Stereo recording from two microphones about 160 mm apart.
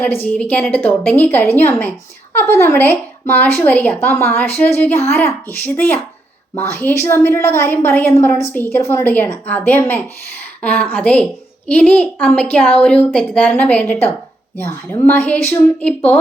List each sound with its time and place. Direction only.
0.0 s speech: 10° left (ahead or behind)